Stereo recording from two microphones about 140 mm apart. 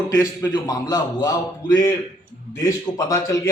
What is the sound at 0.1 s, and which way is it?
A man's voice, 25° left (ahead or behind).